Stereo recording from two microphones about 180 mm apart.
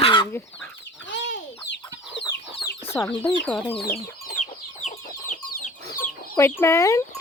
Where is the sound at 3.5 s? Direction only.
5° left (ahead or behind).